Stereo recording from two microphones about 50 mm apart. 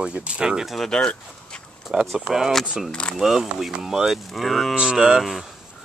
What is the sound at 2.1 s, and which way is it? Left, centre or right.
Speech, centre.